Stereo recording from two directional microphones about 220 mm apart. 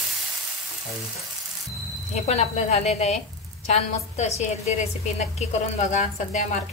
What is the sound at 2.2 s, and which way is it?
A woman's voice, 30° left (ahead or behind).